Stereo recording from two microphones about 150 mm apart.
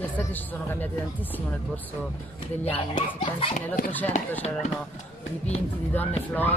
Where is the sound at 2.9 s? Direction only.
50° left (ahead or behind).